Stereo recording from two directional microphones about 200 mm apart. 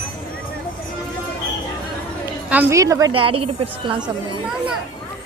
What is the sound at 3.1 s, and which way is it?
A woman's voice, 25° right (ahead or behind).